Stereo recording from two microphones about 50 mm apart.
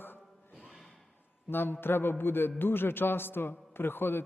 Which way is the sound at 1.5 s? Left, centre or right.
Left.